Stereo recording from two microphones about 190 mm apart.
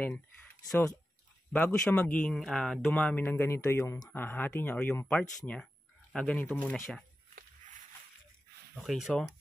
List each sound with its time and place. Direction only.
0.7 s speech: 5° left (ahead or behind)
7.3 s a sound: 40° right (ahead or behind)
8.9 s speech: centre (ahead or behind)